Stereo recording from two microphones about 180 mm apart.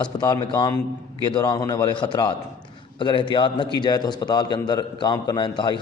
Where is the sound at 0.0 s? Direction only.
25° left (ahead or behind).